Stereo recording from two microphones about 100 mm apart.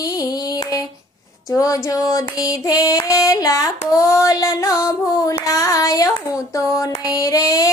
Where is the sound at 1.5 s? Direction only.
35° left (ahead or behind).